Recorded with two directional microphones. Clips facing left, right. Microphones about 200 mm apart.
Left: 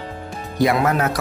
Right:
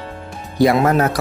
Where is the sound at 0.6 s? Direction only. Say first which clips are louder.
Right 4 dB; 35° right (ahead or behind).